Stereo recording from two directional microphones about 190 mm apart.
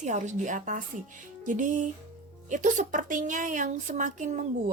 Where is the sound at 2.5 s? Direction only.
40° right (ahead or behind).